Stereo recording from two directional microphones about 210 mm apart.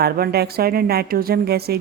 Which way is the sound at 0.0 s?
50° right (ahead or behind).